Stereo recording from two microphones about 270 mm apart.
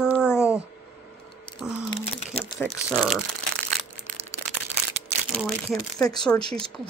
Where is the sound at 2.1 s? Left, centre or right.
Left.